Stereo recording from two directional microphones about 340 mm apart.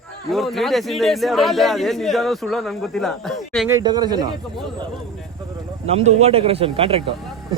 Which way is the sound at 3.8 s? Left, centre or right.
Centre.